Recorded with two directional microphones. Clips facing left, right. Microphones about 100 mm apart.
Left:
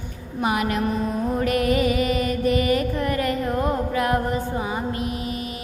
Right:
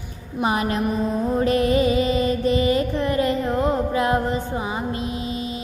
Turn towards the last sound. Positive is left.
turn(degrees=-25)  # may be behind; listen again after turning